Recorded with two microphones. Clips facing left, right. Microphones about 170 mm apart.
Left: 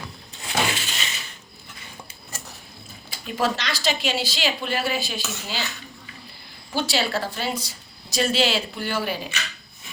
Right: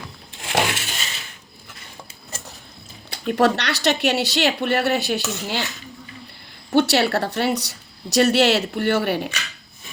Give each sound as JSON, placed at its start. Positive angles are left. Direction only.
{"t": 0.4, "sound": "a sound", "side_deg": -70}
{"t": 3.1, "sound": "a woman's voice", "side_deg": -65}
{"t": 6.7, "sound": "a woman's voice", "side_deg": -65}